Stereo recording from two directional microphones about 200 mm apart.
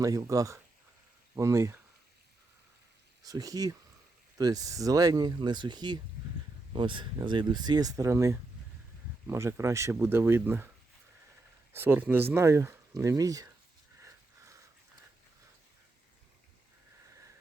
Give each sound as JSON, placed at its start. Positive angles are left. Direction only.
{"t": 0.0, "sound": "speech", "side_deg": -15}
{"t": 3.2, "sound": "speech", "side_deg": -20}
{"t": 11.7, "sound": "speech", "side_deg": -10}